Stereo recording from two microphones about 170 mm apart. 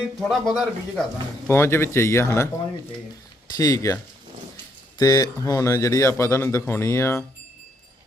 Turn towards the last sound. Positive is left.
turn(degrees=15)  # may be behind; listen again after turning